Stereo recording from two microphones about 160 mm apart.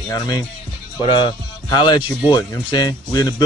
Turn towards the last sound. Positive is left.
turn(degrees=25)  # may be behind; listen again after turning